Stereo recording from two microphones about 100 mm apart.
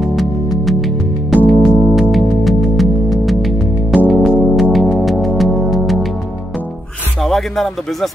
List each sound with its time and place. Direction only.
0.0 s music: centre (ahead or behind)
4.1 s music: centre (ahead or behind)
7.2 s speech: centre (ahead or behind)